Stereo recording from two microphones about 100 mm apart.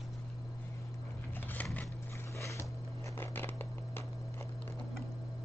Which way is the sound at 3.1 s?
20° left (ahead or behind).